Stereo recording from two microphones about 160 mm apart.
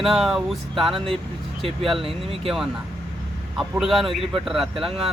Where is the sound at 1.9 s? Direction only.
35° right (ahead or behind).